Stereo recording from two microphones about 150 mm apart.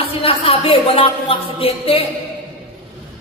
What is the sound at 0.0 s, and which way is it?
A woman's voice, 40° left (ahead or behind).